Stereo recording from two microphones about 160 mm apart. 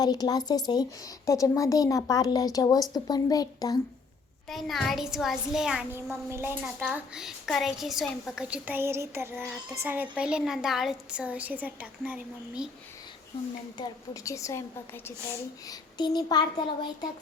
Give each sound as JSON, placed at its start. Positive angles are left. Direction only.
{"t": 0.0, "sound": "a woman's voice", "side_deg": 25}
{"t": 4.4, "sound": "a child's voice", "side_deg": 0}
{"t": 6.1, "sound": "a woman's voice", "side_deg": -15}
{"t": 13.7, "sound": "a woman's voice", "side_deg": 20}
{"t": 15.7, "sound": "a woman's voice", "side_deg": 25}